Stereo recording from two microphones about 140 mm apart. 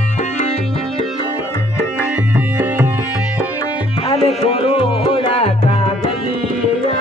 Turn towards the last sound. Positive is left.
turn(degrees=45)  # may be behind; listen again after turning